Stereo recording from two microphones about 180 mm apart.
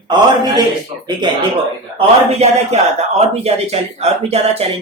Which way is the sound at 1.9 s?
35° right (ahead or behind).